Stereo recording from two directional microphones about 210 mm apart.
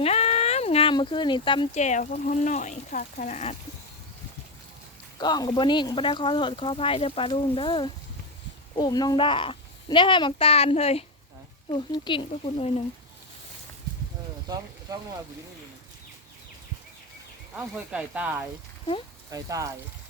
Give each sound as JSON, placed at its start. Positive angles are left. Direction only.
{"t": 0.0, "sound": "speech", "side_deg": 30}
{"t": 5.2, "sound": "speech", "side_deg": 20}
{"t": 14.4, "sound": "a sound", "side_deg": -20}
{"t": 17.9, "sound": "speech", "side_deg": -5}